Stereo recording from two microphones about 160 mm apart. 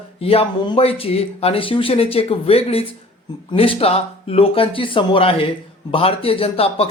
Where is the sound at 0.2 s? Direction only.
40° left (ahead or behind).